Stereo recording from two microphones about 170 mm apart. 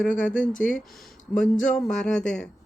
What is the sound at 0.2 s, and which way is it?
Speech, 5° left (ahead or behind).